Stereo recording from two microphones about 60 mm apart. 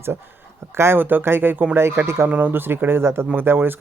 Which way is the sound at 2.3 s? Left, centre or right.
Right.